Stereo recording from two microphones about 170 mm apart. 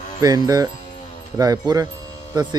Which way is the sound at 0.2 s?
20° right (ahead or behind).